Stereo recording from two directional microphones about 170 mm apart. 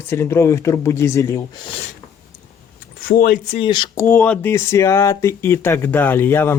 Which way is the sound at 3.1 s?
60° left (ahead or behind).